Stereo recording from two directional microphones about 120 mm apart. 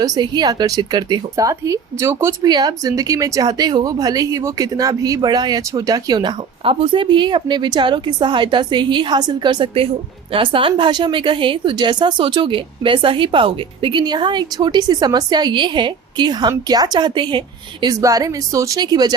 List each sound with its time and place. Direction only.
0.0 s a woman's voice: 35° right (ahead or behind)
18.0 s speech: 30° right (ahead or behind)